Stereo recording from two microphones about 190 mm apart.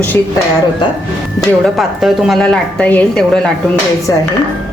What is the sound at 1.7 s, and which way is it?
A woman's voice, centre (ahead or behind).